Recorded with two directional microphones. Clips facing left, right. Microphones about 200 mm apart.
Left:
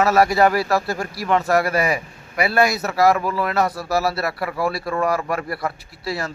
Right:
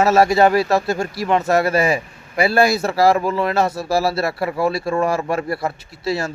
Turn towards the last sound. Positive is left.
turn(degrees=-25)  # may be behind; listen again after turning